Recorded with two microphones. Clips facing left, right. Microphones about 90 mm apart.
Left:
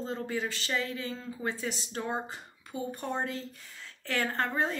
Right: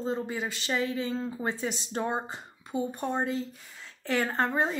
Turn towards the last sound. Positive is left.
turn(degrees=-20)  # may be behind; listen again after turning